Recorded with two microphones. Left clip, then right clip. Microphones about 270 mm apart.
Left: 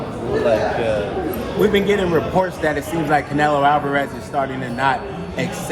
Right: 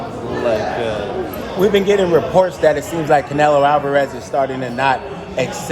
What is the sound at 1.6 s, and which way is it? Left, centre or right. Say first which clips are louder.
A man's voice: right 3 dB; right.